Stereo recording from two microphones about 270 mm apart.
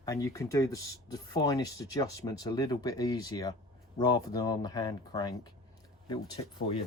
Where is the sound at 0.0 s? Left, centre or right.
Centre.